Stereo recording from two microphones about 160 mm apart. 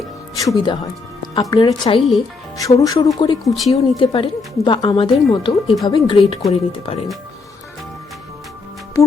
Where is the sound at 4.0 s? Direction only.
30° left (ahead or behind).